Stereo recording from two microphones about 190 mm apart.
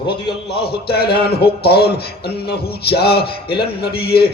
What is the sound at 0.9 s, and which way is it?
Speech, 55° left (ahead or behind).